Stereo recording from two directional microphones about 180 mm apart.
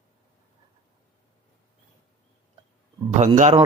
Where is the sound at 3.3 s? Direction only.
40° right (ahead or behind).